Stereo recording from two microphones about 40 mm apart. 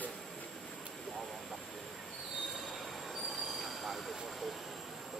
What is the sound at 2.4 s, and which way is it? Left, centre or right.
Train wheels squealing, centre.